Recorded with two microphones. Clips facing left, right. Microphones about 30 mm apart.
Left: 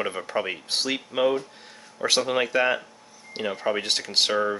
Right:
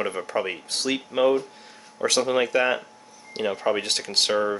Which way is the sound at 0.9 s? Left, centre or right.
Centre.